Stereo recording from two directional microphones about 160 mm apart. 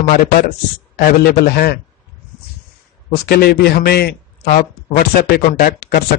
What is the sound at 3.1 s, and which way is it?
A man's voice, 80° left.